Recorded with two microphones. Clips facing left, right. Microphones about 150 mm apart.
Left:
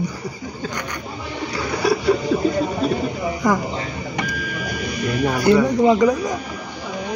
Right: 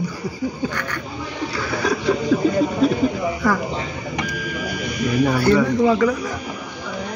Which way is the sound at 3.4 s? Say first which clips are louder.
Left 2 dB; 15° left (ahead or behind).